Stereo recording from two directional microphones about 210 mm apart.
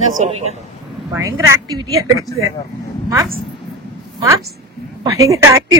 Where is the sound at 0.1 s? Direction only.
35° right (ahead or behind).